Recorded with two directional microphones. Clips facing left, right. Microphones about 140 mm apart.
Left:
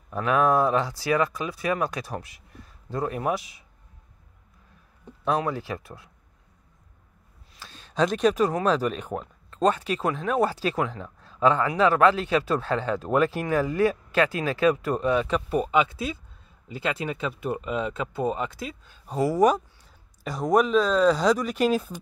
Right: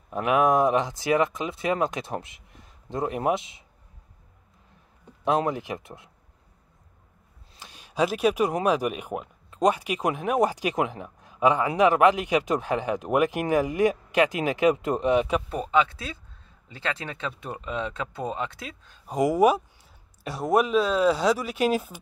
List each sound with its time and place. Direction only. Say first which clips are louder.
0.1 s speech: right 1 dB; 20° right (ahead or behind)
5.2 s speech: right 2 dB; 20° right (ahead or behind)
7.5 s speech: even; 15° right (ahead or behind)
15.5 s speech: left 2 dB; 10° left (ahead or behind)
19.0 s speech: right 1 dB; 15° right (ahead or behind)